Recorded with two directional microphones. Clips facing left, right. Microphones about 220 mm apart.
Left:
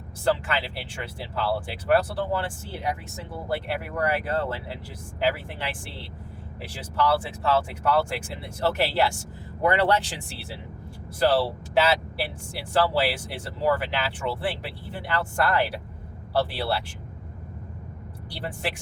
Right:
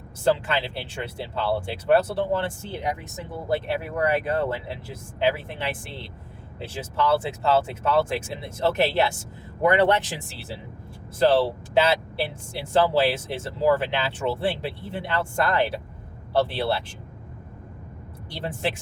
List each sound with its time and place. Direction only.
0.3 s speech: 20° right (ahead or behind)
11.2 s speech: 25° right (ahead or behind)
18.3 s speech: 25° right (ahead or behind)